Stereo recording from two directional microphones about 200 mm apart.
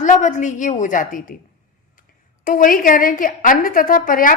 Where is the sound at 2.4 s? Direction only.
45° left (ahead or behind).